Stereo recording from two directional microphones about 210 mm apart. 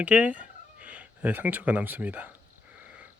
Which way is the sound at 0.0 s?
5° right (ahead or behind).